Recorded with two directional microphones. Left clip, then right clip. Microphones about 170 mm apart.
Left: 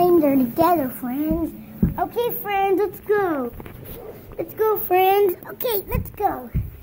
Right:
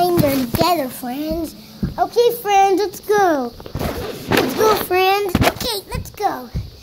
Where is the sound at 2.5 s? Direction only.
25° right (ahead or behind).